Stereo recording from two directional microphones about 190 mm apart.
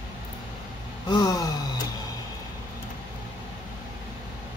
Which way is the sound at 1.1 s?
20° left (ahead or behind).